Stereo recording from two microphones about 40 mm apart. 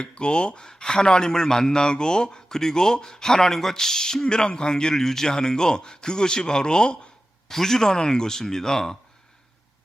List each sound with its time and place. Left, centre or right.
0.0 s speech: left
7.4 s speech: centre